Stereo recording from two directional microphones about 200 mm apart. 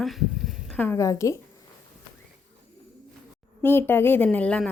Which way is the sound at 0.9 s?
15° left (ahead or behind).